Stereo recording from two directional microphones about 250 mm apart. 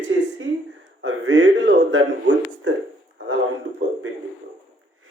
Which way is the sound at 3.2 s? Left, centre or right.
Right.